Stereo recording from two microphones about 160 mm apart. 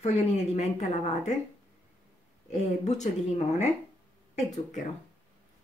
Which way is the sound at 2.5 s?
45° left (ahead or behind).